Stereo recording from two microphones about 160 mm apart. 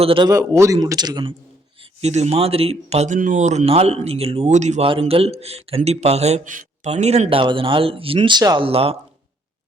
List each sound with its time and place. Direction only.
0.0 s a man's voice: 35° right (ahead or behind)
0.3 s speech: 20° right (ahead or behind)
1.8 s a man's voice: 40° right (ahead or behind)
4.9 s a man's voice: 35° right (ahead or behind)